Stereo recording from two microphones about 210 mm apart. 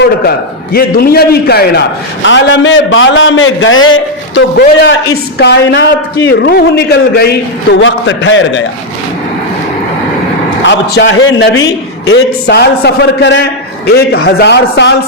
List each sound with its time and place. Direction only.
0.0 s a man's voice: 50° left (ahead or behind)
2.2 s a man's voice: 60° left (ahead or behind)
10.6 s a man's voice: 60° left (ahead or behind)